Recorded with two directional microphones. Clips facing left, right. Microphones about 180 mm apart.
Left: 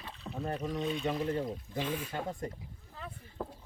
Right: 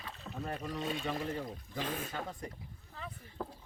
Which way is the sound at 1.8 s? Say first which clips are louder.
Left 1 dB; 45° right (ahead or behind).